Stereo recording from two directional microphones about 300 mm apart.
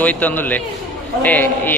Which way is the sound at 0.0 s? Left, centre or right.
Centre.